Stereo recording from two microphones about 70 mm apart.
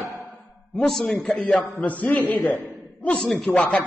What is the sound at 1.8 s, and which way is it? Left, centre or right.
Speech, left.